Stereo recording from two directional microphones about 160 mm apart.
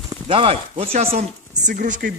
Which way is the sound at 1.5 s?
50° right (ahead or behind).